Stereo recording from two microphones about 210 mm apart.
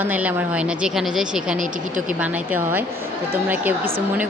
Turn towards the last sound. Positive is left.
turn(degrees=-10)  # may be behind; listen again after turning